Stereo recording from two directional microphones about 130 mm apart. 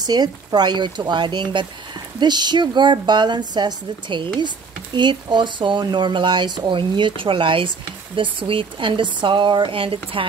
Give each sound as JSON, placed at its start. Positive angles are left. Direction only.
{"t": 0.0, "sound": "a woman's voice", "side_deg": -30}